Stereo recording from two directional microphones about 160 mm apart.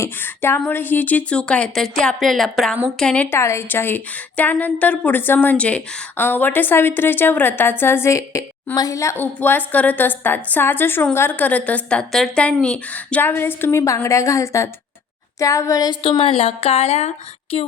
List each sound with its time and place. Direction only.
0.0 s a woman's voice: 15° left (ahead or behind); by 17.7 s 35° left (ahead or behind)